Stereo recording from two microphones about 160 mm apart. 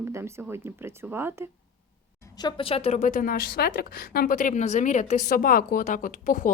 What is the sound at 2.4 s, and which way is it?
A woman's voice, 35° left (ahead or behind).